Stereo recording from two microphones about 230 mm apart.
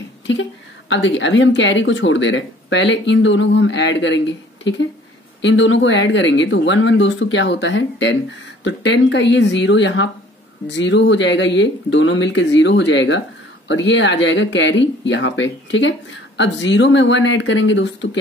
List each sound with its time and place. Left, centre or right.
0.3 s a woman's voice: left